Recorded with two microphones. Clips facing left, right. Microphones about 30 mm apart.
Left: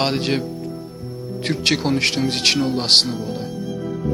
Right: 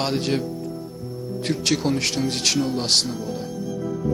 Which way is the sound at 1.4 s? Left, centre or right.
Left.